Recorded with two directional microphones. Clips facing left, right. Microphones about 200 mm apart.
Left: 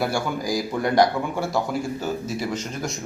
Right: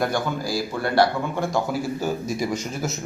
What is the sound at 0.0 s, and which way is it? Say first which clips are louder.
A man's voice: even; 10° left (ahead or behind).